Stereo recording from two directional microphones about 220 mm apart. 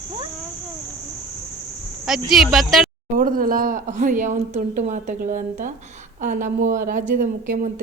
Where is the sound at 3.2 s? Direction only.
40° right (ahead or behind).